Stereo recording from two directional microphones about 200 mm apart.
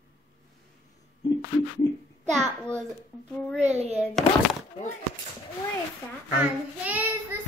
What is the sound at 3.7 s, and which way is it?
Speech, 35° right (ahead or behind).